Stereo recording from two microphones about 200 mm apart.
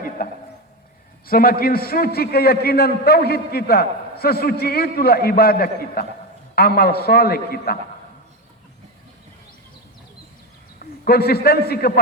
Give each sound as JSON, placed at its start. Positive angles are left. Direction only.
{"t": 0.2, "sound": "a man's voice", "side_deg": 45}
{"t": 10.8, "sound": "a man's voice", "side_deg": 50}